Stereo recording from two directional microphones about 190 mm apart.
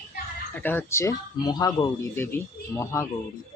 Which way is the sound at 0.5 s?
10° left (ahead or behind).